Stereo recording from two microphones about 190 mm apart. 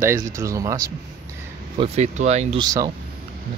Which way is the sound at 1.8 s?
35° right (ahead or behind).